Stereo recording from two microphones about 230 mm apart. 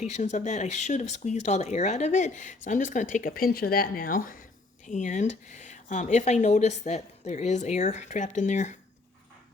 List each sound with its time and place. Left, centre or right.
0.0 s speech: left